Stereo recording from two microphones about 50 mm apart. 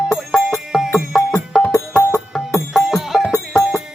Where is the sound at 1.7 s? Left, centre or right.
Left.